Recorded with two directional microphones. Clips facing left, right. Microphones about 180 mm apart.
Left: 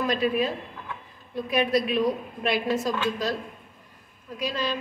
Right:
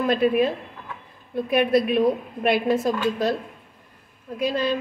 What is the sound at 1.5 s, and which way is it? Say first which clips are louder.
A woman's voice: right 4 dB; 50° right (ahead or behind).